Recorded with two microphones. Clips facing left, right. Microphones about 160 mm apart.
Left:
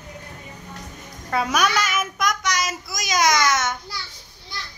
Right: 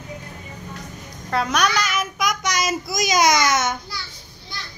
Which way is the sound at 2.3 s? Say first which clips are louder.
Right 4 dB; 10° right (ahead or behind).